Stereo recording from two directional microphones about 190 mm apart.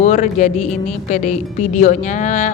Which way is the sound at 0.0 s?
40° left (ahead or behind).